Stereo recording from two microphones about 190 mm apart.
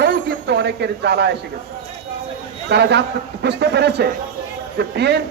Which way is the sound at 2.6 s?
60° right (ahead or behind).